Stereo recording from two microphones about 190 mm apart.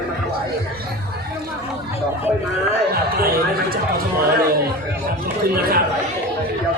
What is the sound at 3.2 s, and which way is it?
Speech, 50° right (ahead or behind).